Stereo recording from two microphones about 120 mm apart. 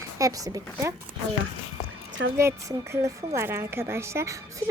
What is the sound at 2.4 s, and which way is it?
A woman's voice, 25° right (ahead or behind).